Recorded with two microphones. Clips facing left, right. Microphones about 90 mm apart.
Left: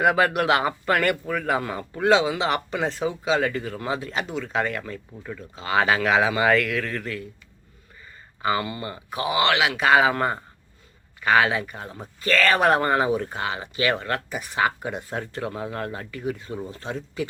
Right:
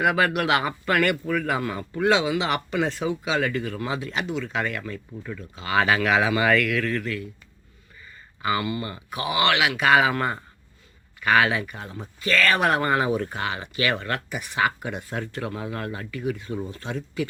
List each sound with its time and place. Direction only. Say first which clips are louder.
0.0 s speech: left 2 dB; 30° left (ahead or behind)
8.4 s speech: even; 30° left (ahead or behind)